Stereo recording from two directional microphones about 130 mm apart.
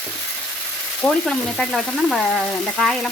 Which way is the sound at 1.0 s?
5° left (ahead or behind).